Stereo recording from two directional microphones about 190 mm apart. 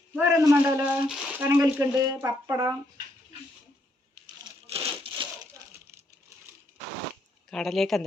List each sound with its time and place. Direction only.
0.2 s speech: 15° right (ahead or behind)
4.6 s a sound: 30° right (ahead or behind)
7.5 s speech: centre (ahead or behind)